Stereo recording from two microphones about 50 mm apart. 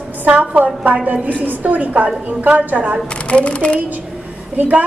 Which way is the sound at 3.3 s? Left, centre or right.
Left.